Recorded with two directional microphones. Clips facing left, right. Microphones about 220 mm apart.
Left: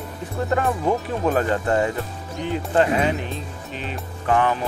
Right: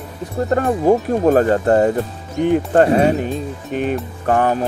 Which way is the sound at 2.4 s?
55° right (ahead or behind).